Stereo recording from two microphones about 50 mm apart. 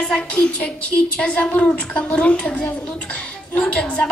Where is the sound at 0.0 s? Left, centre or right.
Left.